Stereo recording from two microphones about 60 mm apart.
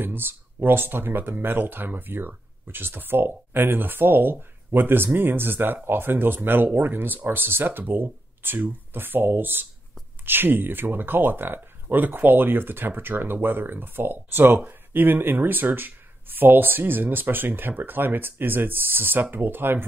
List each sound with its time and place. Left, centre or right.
0.0 s speech: right